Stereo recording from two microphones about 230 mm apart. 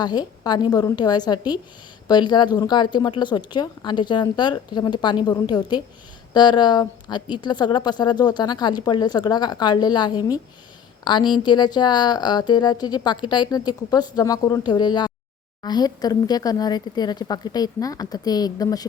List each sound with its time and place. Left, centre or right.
0.0 s a woman's voice: centre